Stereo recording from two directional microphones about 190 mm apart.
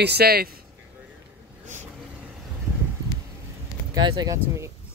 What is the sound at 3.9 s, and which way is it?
Speech, 20° right (ahead or behind).